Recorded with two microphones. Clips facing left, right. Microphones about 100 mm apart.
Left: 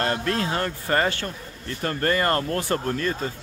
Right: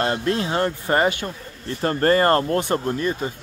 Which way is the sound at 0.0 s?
25° right (ahead or behind).